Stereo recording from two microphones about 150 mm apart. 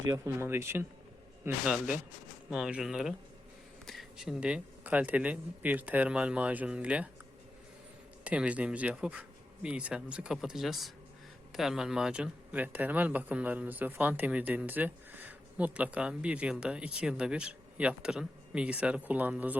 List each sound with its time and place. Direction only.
0.1 s speech: 15° right (ahead or behind)
8.2 s speech: 10° right (ahead or behind)